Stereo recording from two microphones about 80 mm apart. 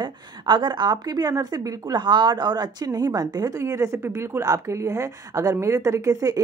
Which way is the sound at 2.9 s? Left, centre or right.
Right.